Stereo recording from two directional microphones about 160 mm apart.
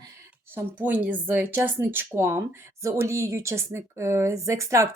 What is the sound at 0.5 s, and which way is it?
Speech, 10° right (ahead or behind).